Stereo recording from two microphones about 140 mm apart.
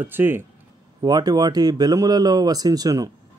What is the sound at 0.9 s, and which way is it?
Speech, 30° right (ahead or behind).